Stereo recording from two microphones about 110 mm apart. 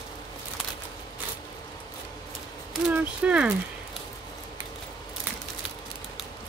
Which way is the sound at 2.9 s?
10° right (ahead or behind).